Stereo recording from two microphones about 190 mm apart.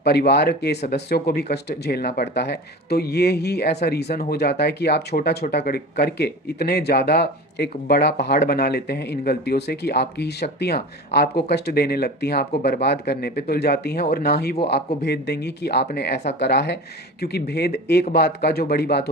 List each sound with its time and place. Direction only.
0.0 s speech: 60° left (ahead or behind)